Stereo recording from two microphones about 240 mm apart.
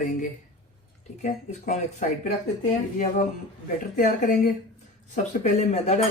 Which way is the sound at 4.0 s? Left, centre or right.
Left.